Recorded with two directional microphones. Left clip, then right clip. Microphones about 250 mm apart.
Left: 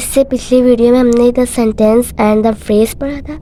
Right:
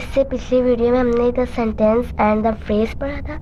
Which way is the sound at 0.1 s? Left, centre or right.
Left.